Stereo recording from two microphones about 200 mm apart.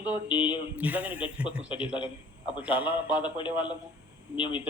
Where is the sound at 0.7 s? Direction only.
10° right (ahead or behind).